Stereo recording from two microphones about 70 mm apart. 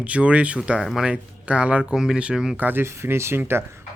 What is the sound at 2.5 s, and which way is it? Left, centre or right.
Speech, right.